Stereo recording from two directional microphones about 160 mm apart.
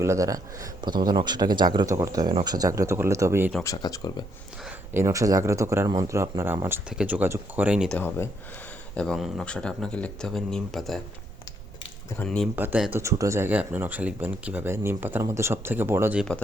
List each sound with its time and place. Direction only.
0.0 s speech: 20° right (ahead or behind)
3.6 s speech: 20° left (ahead or behind)
4.9 s speech: 20° right (ahead or behind)
7.9 s speech: 15° left (ahead or behind)
9.0 s speech: centre (ahead or behind)
12.2 s speech: 5° left (ahead or behind)
12.5 s speech: 10° right (ahead or behind)